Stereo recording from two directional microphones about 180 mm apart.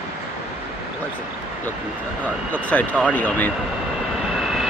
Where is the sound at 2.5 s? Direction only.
10° left (ahead or behind).